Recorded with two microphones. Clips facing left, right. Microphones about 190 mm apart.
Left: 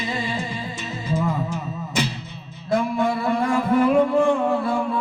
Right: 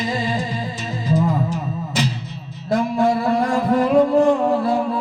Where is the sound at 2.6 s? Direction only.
40° right (ahead or behind).